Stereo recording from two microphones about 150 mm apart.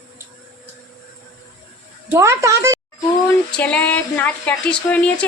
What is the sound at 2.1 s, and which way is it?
Speech, 20° right (ahead or behind).